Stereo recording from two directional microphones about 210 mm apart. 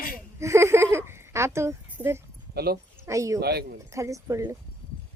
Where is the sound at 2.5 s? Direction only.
50° right (ahead or behind).